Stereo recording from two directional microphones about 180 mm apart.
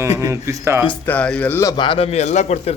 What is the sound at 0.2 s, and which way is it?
Speech, 15° right (ahead or behind).